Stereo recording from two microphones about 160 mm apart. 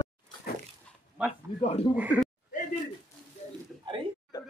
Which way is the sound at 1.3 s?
40° left (ahead or behind).